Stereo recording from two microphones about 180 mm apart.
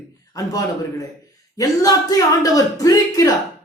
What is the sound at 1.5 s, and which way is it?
Speech, 20° left (ahead or behind).